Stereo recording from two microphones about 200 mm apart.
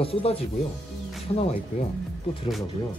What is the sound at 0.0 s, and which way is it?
Speech, 30° left (ahead or behind).